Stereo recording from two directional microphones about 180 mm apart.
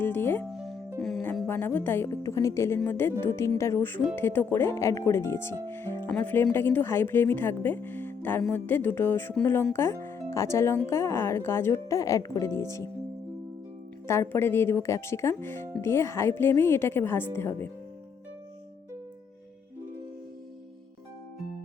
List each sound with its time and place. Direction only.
0.0 s speech: 10° left (ahead or behind)
0.5 s music: centre (ahead or behind)
1.5 s speech: 10° left (ahead or behind)
14.1 s speech: 15° left (ahead or behind)